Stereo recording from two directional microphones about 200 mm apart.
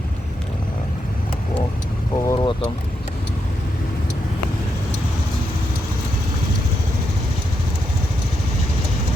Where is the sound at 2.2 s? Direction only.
20° left (ahead or behind).